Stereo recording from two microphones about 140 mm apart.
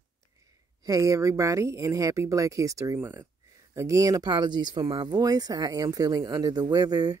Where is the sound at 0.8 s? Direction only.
20° right (ahead or behind).